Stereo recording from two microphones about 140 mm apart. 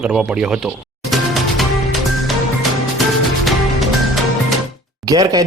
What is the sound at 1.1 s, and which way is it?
Music, centre (ahead or behind).